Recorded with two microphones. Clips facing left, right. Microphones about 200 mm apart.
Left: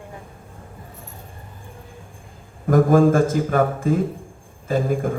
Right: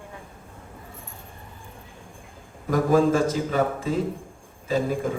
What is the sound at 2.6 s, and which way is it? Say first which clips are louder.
Speech: left 5 dB; 50° left (ahead or behind).